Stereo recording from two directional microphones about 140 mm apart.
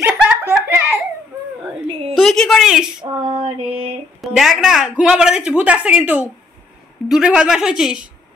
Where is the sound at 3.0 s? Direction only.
35° right (ahead or behind).